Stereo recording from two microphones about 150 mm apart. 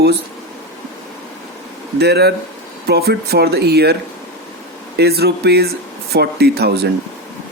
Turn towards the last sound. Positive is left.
turn(degrees=-90)